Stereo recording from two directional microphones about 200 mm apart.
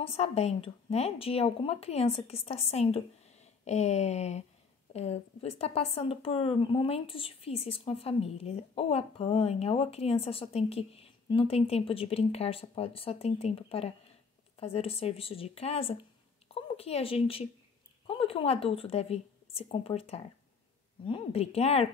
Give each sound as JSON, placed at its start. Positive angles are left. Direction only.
{"t": 0.0, "sound": "a woman's voice", "side_deg": 30}